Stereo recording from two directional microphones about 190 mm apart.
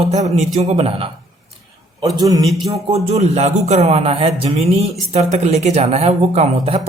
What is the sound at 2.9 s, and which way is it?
Speech, 30° right (ahead or behind).